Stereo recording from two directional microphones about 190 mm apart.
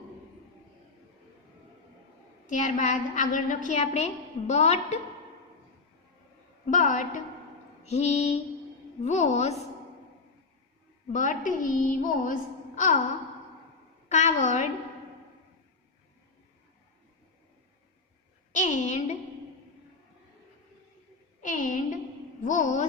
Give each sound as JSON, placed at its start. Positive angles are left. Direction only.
{"t": 2.5, "sound": "a woman's voice", "side_deg": 40}
{"t": 6.7, "sound": "a woman's voice", "side_deg": 45}
{"t": 11.1, "sound": "a woman's voice", "side_deg": 45}
{"t": 14.1, "sound": "a woman's voice", "side_deg": 40}
{"t": 18.5, "sound": "a woman's voice", "side_deg": 40}
{"t": 21.4, "sound": "a woman's voice", "side_deg": 45}